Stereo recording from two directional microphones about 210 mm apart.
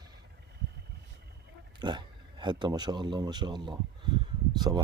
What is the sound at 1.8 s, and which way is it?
Speech, 20° right (ahead or behind).